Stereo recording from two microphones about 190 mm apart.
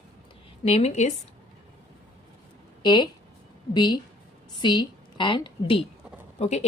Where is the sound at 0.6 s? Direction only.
35° left (ahead or behind).